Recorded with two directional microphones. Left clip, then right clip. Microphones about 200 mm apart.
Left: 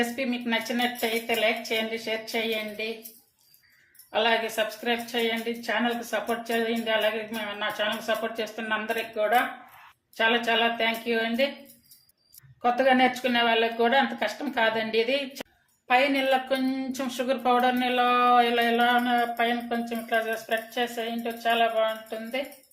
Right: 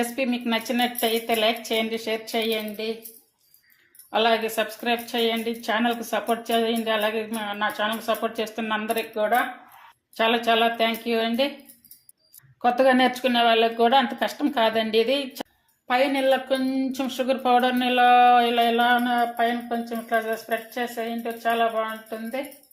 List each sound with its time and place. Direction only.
0.0 s speech: 30° right (ahead or behind)
4.1 s speech: 35° right (ahead or behind)
12.6 s speech: 30° right (ahead or behind)